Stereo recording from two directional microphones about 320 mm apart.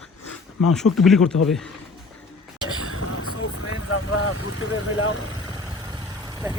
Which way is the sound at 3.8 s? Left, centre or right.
Left.